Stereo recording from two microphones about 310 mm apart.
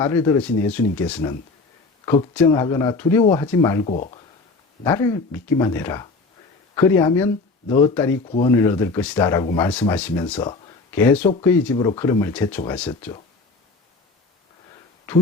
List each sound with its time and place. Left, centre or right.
0.0 s speech: centre
3.8 s speech: left
4.8 s speech: centre
8.2 s speech: centre
12.9 s speech: centre